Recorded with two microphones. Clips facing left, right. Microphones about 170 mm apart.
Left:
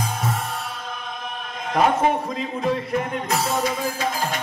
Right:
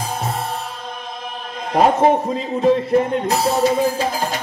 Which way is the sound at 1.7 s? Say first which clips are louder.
Right 5 dB; 35° right (ahead or behind).